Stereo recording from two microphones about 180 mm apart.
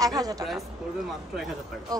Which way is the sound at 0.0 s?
20° right (ahead or behind).